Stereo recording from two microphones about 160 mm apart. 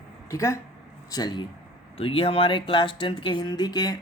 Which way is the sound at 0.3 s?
20° left (ahead or behind).